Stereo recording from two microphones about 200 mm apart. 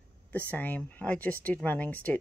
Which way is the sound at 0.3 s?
10° left (ahead or behind).